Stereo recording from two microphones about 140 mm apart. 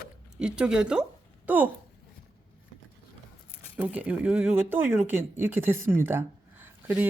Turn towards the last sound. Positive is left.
turn(degrees=-15)  # may be behind; listen again after turning